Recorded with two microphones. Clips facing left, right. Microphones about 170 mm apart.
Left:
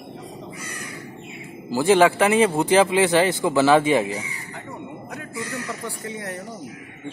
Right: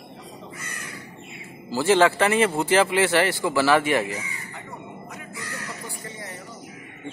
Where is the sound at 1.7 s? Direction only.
15° left (ahead or behind).